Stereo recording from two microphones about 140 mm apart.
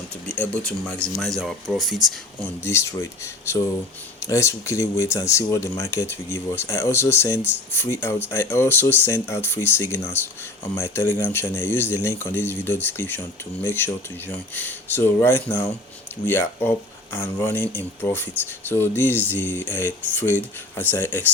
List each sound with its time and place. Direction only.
0.3 s speech: 5° left (ahead or behind)
2.4 s speech: 20° left (ahead or behind)